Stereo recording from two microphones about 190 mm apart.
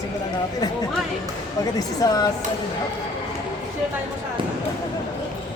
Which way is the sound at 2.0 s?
20° left (ahead or behind).